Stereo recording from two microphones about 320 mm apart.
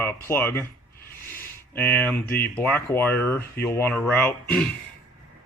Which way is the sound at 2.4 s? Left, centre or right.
Centre.